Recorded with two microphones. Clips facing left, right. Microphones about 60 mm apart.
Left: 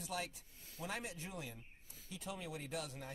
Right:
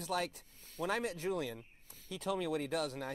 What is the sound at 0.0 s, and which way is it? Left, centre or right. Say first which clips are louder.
Speech: right 7 dB; right.